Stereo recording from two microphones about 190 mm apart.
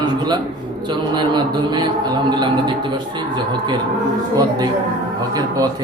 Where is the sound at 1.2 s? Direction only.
25° right (ahead or behind).